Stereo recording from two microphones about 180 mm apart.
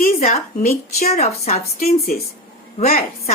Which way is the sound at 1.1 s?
35° left (ahead or behind).